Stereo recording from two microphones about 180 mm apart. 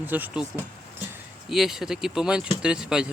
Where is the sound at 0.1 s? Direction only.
10° right (ahead or behind).